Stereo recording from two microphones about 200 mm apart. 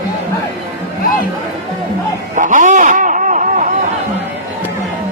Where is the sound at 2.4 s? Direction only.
40° right (ahead or behind).